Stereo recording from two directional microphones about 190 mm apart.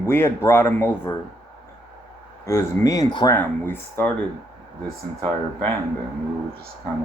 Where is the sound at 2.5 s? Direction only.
15° left (ahead or behind).